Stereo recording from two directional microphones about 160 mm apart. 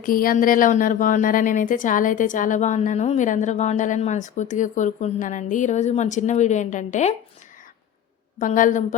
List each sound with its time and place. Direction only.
0.0 s a woman's voice: 65° left (ahead or behind)
8.4 s a woman's voice: 55° left (ahead or behind)